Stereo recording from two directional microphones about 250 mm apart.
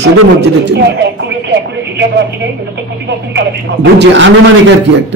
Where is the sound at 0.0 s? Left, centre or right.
Right.